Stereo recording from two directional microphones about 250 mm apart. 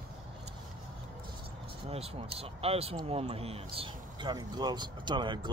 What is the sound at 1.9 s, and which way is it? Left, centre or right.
Speech, right.